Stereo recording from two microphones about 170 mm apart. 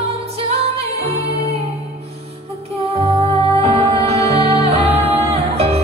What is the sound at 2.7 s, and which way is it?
Music, 35° right (ahead or behind).